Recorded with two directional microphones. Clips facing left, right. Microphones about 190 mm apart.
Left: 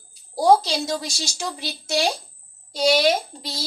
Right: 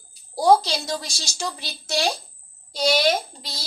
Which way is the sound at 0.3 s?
20° left (ahead or behind).